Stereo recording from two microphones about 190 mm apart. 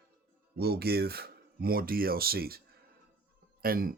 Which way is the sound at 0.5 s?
55° right (ahead or behind).